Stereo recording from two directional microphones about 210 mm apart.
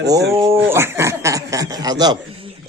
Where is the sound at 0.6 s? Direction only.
10° right (ahead or behind).